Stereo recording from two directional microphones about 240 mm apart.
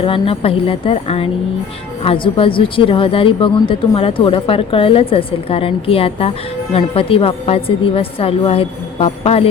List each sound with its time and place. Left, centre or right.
0.0 s a woman's voice: left